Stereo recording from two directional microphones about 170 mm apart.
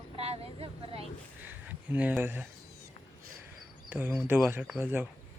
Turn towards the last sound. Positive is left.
turn(degrees=-10)  # may be behind; listen again after turning